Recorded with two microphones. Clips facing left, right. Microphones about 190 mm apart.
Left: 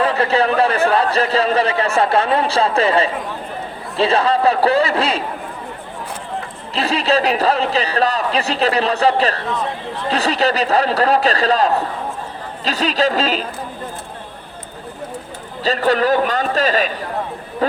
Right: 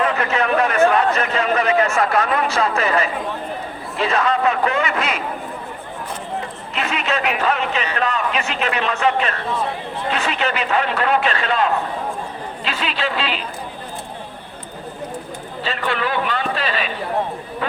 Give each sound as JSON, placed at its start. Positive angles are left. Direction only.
{"t": 0.0, "sound": "speech", "side_deg": 30}
{"t": 6.7, "sound": "speech", "side_deg": 35}
{"t": 15.6, "sound": "speech", "side_deg": 40}